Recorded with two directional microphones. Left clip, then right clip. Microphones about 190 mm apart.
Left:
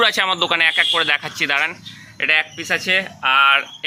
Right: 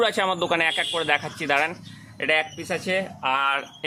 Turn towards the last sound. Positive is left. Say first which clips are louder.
# left 9 dB
turn(degrees=-20)  # may be behind; listen again after turning